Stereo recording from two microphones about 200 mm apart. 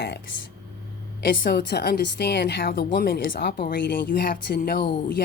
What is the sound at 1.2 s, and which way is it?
A woman's voice, 50° left (ahead or behind).